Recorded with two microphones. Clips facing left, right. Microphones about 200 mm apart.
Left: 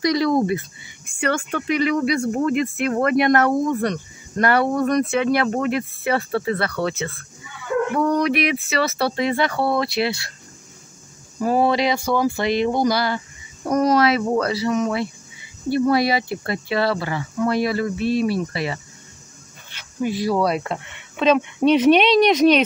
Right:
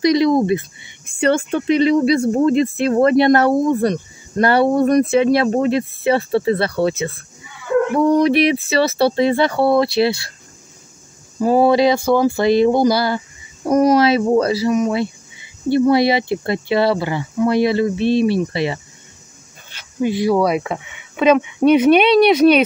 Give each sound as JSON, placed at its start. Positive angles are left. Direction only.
{"t": 0.0, "sound": "a sound", "side_deg": -20}
{"t": 1.2, "sound": "speech", "side_deg": -25}
{"t": 11.4, "sound": "speech", "side_deg": -30}
{"t": 20.0, "sound": "speech", "side_deg": -25}